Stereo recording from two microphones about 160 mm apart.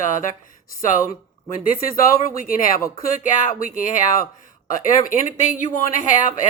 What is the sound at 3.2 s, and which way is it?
Speech, 50° left (ahead or behind).